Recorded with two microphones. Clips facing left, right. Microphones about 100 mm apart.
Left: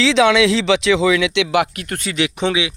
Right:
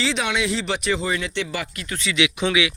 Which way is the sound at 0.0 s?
90° left.